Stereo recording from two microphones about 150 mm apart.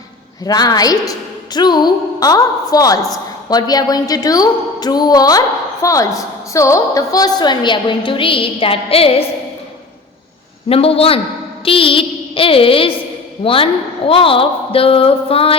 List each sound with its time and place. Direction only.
0.4 s a woman's voice: 25° left (ahead or behind)
10.7 s a woman's voice: 40° left (ahead or behind)
11.6 s music: 35° left (ahead or behind)
13.4 s a woman's voice: 35° left (ahead or behind)